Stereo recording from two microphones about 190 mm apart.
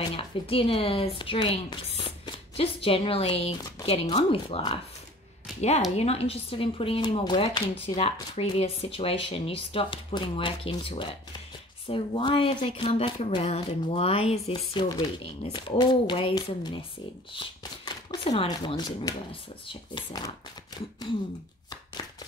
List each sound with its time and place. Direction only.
0.1 s speech: 30° left (ahead or behind)
5.9 s speech: 30° left (ahead or behind)
17.8 s speech: 25° left (ahead or behind)